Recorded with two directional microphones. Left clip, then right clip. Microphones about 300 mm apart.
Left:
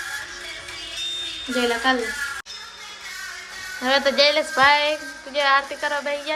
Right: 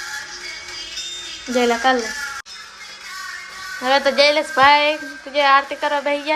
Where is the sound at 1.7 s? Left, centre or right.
Right.